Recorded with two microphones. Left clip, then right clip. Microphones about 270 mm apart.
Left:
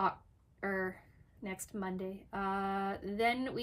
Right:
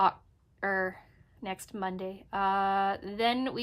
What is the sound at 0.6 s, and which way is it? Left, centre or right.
Speech, centre.